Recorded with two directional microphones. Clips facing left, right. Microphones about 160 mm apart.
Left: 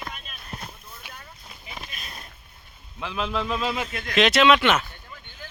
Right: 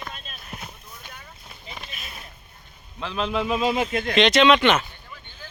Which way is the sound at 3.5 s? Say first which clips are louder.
Right 4 dB; 15° right (ahead or behind).